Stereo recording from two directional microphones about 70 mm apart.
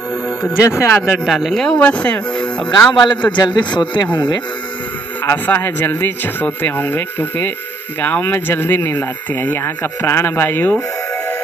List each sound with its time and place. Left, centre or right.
0.6 s speech: left
1.0 s speech: centre
1.8 s speech: centre
3.0 s a man's voice: left
5.2 s speech: left